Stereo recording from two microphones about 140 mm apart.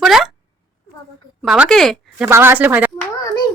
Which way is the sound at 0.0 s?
Centre (ahead or behind).